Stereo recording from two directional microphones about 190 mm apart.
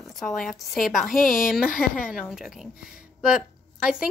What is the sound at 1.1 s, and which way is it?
Speech, 45° left (ahead or behind).